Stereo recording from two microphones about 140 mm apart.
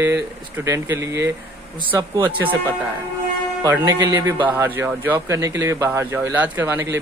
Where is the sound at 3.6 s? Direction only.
20° right (ahead or behind).